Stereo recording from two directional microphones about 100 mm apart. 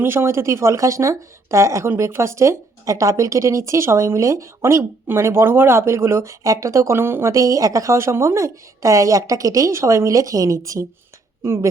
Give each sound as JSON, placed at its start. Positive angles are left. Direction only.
{"t": 0.0, "sound": "speech", "side_deg": -25}